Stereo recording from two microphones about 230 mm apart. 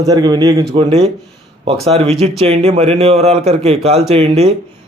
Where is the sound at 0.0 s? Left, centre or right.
Centre.